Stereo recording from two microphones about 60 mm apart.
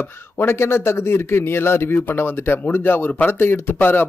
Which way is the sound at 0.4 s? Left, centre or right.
Left.